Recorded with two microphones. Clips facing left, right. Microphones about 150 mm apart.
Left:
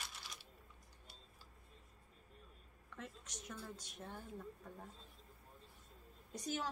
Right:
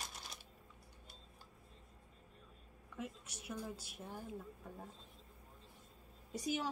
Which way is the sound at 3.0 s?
10° right (ahead or behind).